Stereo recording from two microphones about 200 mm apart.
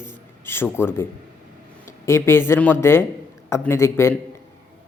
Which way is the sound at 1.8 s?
15° left (ahead or behind).